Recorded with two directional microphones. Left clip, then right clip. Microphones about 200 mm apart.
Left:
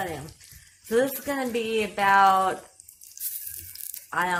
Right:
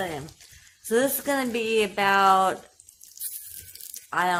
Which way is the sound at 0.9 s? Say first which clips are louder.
Right 1 dB; 35° right (ahead or behind).